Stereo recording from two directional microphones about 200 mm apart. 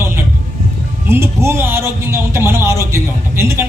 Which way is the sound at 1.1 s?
10° right (ahead or behind).